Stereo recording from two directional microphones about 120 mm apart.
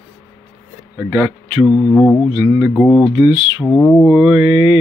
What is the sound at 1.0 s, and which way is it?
Speech, 10° right (ahead or behind).